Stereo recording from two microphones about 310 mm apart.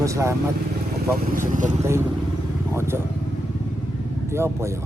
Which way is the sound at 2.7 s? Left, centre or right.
Centre.